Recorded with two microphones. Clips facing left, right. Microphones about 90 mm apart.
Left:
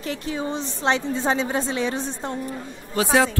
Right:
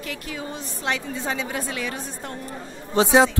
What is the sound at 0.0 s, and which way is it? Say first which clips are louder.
A woman's voice: left 5 dB; 30° left (ahead or behind).